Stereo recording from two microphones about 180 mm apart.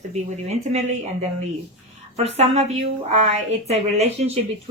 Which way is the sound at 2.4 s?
35° right (ahead or behind).